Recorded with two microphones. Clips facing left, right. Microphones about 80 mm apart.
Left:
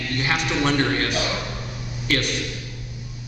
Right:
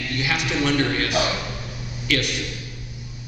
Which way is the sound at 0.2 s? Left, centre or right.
Left.